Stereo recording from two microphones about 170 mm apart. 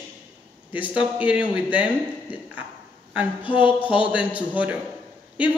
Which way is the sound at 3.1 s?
10° right (ahead or behind).